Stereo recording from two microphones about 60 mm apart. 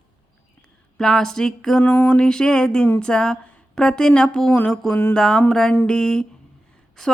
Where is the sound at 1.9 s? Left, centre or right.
Left.